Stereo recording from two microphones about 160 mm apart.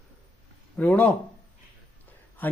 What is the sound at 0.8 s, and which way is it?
Speech, 10° left (ahead or behind).